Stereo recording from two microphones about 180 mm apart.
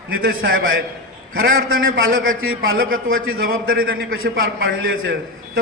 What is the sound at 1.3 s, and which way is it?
Speech, 55° right (ahead or behind).